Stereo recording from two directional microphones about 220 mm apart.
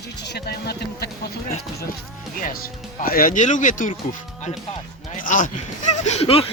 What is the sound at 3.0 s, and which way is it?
Speech, 40° left (ahead or behind).